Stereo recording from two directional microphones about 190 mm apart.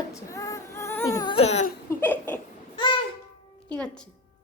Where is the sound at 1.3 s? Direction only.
35° left (ahead or behind).